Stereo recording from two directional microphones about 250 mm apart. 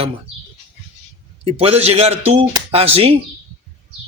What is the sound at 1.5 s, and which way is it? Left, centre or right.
A man's voice, right.